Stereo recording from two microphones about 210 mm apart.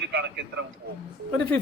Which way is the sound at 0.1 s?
55° right (ahead or behind).